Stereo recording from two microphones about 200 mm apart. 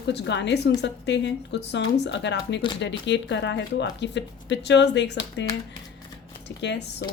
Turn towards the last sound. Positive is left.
turn(degrees=60)  # may be behind; listen again after turning